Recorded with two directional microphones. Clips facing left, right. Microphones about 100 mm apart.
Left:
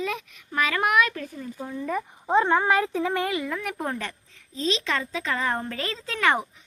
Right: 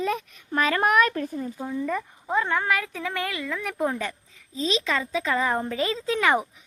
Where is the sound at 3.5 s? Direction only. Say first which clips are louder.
Right 3 dB; 5° left (ahead or behind); by 6.4 s 15° right (ahead or behind).